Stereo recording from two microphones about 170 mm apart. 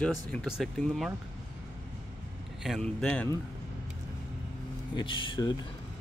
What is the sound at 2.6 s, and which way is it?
Speech, centre (ahead or behind).